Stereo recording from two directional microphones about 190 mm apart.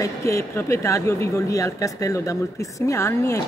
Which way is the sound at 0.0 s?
15° left (ahead or behind).